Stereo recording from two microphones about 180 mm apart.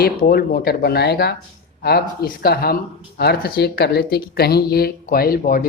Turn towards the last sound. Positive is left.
turn(degrees=55)  # may be behind; listen again after turning